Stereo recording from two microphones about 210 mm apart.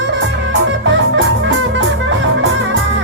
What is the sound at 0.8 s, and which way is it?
Music, 65° right (ahead or behind).